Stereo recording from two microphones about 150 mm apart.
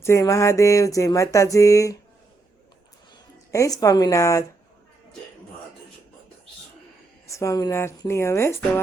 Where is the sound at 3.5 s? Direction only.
20° left (ahead or behind).